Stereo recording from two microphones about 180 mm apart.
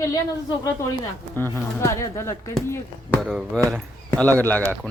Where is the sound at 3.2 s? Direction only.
Centre (ahead or behind).